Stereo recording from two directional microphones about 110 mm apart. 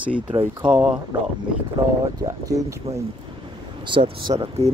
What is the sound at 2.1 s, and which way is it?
Speech, 30° right (ahead or behind).